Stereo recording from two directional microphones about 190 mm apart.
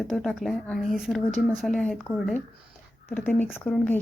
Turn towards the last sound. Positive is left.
turn(degrees=10)  # may be behind; listen again after turning